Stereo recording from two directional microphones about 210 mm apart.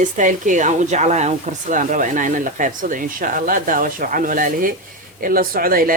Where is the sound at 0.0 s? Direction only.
35° right (ahead or behind).